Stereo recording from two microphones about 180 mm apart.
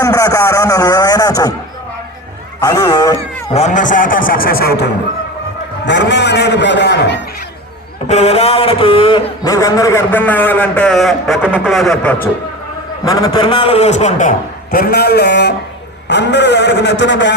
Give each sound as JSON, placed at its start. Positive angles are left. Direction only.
{"t": 0.0, "sound": "a sound", "side_deg": 20}
{"t": 2.6, "sound": "a sound", "side_deg": 20}
{"t": 3.5, "sound": "a man's voice", "side_deg": 40}
{"t": 5.8, "sound": "a man's voice", "side_deg": 75}
{"t": 8.0, "sound": "a man's voice", "side_deg": 35}
{"t": 13.1, "sound": "a man's voice", "side_deg": 20}